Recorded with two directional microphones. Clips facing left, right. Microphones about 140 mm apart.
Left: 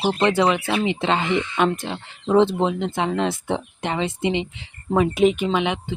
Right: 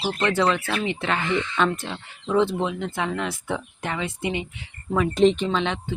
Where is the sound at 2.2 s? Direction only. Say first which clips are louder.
Left 4 dB; 30° left (ahead or behind).